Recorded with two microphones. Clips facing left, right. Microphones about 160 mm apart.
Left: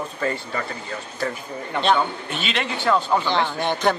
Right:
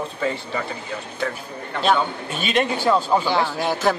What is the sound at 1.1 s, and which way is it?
Speech, 5° left (ahead or behind).